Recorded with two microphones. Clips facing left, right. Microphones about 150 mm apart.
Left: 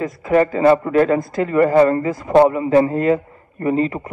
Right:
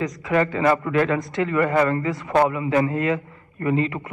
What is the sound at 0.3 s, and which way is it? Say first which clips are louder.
A man's voice: left 6 dB; 35° left (ahead or behind).